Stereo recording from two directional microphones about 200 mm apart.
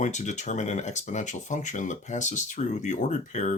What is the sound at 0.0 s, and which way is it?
Speech, 35° left (ahead or behind).